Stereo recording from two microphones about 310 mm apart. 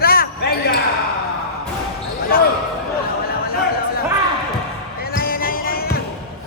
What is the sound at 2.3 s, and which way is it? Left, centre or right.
Basketball bounce, left.